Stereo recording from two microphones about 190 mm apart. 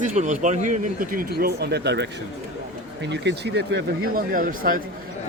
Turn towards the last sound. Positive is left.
turn(degrees=-45)  # may be behind; listen again after turning